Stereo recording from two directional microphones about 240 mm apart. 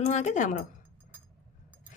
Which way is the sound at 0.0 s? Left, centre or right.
Left.